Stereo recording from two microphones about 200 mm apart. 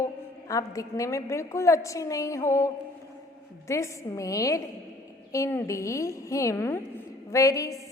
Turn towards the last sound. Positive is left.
turn(degrees=15)  # may be behind; listen again after turning